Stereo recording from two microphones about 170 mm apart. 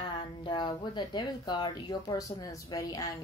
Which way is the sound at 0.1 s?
30° left (ahead or behind).